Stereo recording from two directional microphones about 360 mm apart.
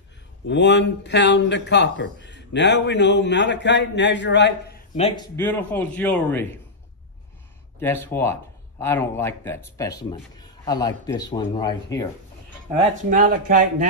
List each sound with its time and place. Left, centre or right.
0.5 s speech: left; by 6.4 s centre
7.8 s speech: centre
12.9 s speech: right